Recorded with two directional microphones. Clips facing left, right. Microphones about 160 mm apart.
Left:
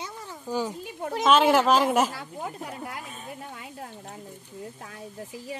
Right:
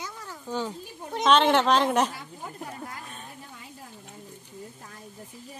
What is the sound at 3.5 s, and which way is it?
Speech, 70° left (ahead or behind).